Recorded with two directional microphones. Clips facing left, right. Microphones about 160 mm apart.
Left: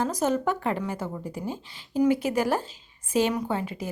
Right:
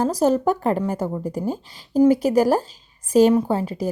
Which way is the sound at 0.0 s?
35° right (ahead or behind).